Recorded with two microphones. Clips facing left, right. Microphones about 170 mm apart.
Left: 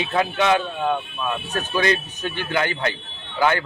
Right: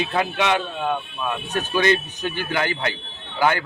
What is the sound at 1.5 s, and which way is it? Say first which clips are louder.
Speech: right 2 dB; 10° right (ahead or behind).